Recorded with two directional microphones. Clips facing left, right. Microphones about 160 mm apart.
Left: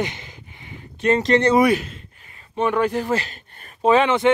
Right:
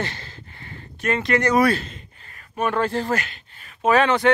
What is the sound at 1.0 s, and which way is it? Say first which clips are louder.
Speech: left 5 dB; 30° left (ahead or behind).